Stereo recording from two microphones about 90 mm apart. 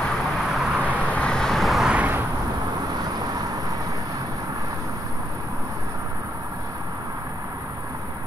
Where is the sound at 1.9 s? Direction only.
20° right (ahead or behind).